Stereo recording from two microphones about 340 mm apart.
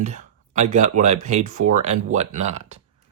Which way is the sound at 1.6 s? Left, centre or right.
Right.